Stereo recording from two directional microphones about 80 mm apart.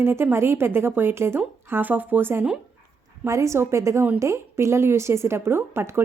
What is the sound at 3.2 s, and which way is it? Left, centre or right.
A woman's voice, right.